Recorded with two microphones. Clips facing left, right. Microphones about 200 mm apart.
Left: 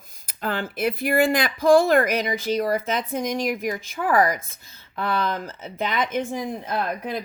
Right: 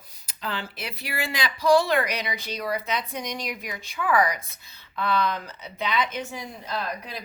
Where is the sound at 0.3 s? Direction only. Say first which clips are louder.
Left 6 dB; 50° left (ahead or behind).